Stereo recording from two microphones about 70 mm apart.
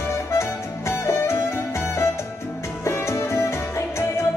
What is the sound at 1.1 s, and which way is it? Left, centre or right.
Music, left.